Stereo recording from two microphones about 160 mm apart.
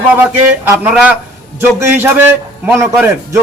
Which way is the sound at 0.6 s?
10° right (ahead or behind).